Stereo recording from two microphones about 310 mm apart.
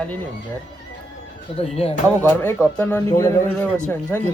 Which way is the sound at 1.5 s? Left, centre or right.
Centre.